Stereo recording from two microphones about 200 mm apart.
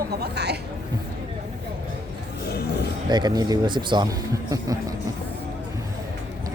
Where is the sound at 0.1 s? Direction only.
55° right (ahead or behind).